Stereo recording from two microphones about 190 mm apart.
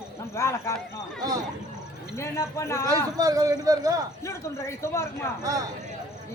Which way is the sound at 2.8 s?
20° right (ahead or behind).